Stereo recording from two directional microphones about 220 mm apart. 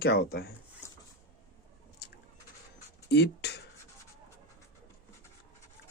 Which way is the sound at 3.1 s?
50° left (ahead or behind).